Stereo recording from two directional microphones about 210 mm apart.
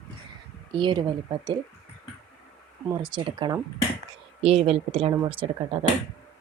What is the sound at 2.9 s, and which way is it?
Speech, 20° right (ahead or behind).